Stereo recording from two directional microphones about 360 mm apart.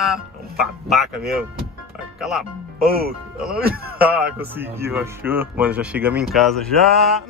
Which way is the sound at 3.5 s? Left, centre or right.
Right.